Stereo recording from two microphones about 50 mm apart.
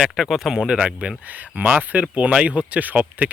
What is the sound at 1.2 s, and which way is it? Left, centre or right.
Speech, right.